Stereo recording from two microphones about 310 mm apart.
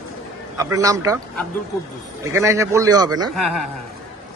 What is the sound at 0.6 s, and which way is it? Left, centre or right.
Speech, centre.